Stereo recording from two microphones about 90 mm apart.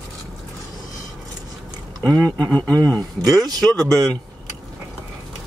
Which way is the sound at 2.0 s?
40° right (ahead or behind).